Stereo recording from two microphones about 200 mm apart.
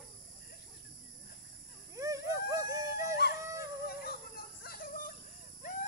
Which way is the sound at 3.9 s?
50° left (ahead or behind).